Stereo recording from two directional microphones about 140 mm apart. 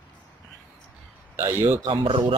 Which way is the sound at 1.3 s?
15° right (ahead or behind).